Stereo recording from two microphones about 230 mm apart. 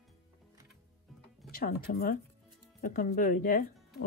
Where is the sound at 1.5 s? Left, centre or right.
Left.